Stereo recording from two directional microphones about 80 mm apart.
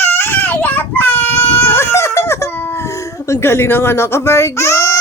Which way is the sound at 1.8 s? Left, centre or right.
Left.